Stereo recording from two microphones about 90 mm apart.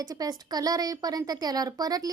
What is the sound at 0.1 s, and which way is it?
A woman's voice, 45° right (ahead or behind).